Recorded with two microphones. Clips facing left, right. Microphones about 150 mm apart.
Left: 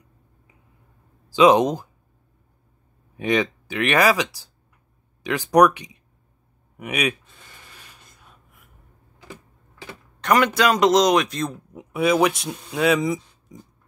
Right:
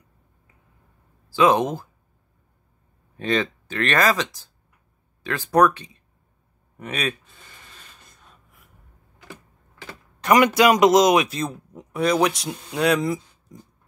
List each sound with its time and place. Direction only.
1.3 s speech: 15° left (ahead or behind)
3.2 s speech: 15° left (ahead or behind)
7.7 s gasp: 10° left (ahead or behind)
10.2 s speech: 10° right (ahead or behind)